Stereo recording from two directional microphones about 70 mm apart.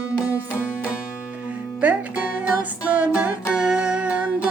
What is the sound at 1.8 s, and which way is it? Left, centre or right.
Music, right.